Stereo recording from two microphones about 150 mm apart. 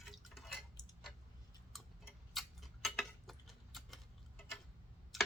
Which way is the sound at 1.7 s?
Centre (ahead or behind).